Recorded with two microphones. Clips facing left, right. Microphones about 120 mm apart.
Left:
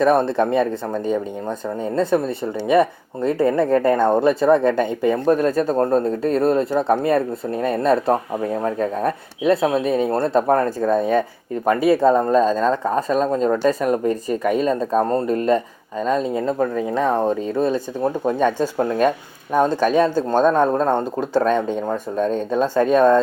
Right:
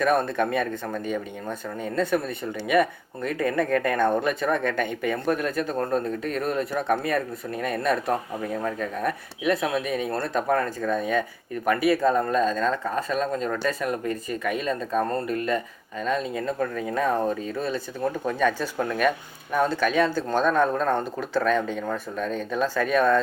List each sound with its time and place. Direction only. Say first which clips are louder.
0.0 s speech: left 6 dB; 30° left (ahead or behind)
20.4 s speech: left 5 dB; 35° left (ahead or behind)